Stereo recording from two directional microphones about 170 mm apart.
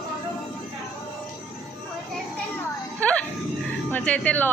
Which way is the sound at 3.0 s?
5° left (ahead or behind).